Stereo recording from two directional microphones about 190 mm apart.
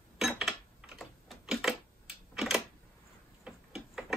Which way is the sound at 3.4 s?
5° right (ahead or behind).